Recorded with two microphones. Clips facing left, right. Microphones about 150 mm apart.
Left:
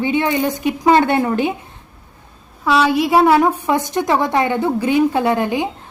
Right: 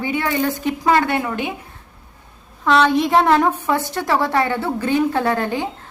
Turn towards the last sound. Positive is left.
turn(degrees=15)  # may be behind; listen again after turning